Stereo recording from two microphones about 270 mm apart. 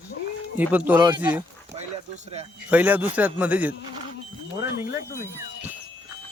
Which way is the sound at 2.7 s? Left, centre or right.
Centre.